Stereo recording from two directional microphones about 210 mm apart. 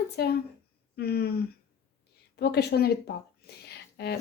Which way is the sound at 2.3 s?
50° left (ahead or behind).